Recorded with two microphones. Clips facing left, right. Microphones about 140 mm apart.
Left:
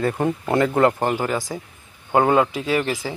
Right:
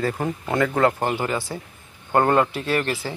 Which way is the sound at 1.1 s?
10° left (ahead or behind).